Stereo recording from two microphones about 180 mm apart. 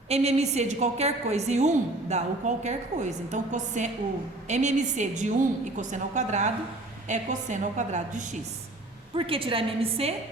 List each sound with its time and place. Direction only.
0.1 s a woman's voice: 35° right (ahead or behind)
9.1 s a woman's voice: 30° right (ahead or behind)